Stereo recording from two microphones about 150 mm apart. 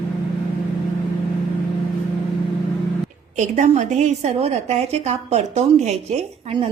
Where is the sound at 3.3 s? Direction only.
55° right (ahead or behind).